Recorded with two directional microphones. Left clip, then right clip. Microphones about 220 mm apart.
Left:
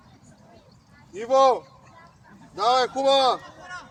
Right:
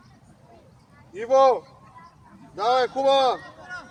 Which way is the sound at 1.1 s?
50° left (ahead or behind).